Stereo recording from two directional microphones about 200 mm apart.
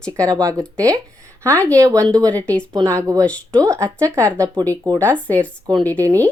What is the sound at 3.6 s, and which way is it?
Speech, 15° right (ahead or behind).